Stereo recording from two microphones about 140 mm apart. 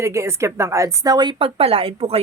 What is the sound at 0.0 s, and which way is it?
Speech, 20° right (ahead or behind).